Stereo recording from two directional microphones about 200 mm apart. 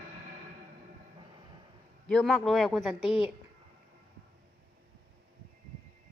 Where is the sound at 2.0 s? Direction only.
5° left (ahead or behind).